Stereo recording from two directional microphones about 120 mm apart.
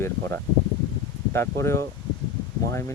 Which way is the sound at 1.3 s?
20° left (ahead or behind).